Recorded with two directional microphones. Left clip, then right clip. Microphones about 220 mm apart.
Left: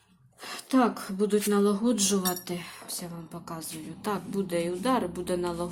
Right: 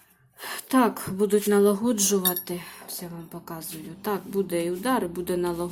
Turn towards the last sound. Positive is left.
turn(degrees=-10)  # may be behind; listen again after turning